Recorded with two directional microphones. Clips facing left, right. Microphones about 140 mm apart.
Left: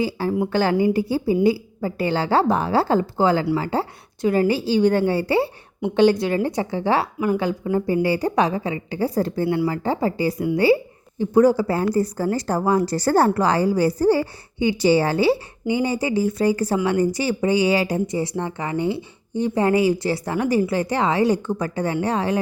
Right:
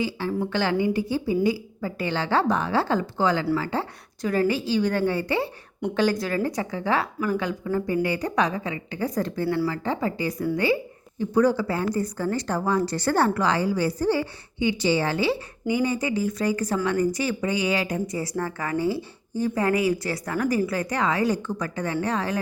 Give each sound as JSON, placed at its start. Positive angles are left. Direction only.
{"t": 0.0, "sound": "a woman's voice", "side_deg": 35}